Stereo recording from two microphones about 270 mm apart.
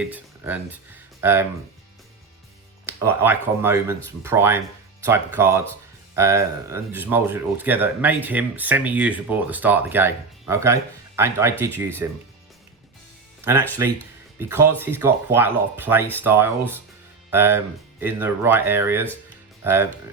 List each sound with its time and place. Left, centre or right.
0.0 s speech: centre
2.8 s speech: centre
13.4 s speech: centre